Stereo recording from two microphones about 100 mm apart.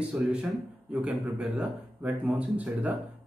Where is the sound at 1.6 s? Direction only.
15° right (ahead or behind).